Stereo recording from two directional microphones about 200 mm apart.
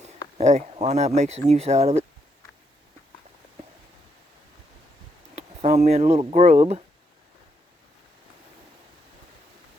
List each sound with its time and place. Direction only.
0.3 s speech: 35° right (ahead or behind)
5.3 s speech: 35° right (ahead or behind)